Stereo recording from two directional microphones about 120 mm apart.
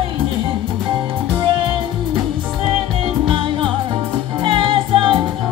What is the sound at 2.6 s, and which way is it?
Music, 45° right (ahead or behind).